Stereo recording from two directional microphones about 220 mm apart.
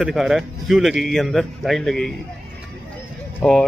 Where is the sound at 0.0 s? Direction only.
Centre (ahead or behind).